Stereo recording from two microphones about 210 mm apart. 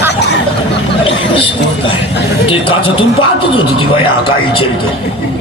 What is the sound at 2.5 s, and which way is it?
A man's voice, 25° left (ahead or behind).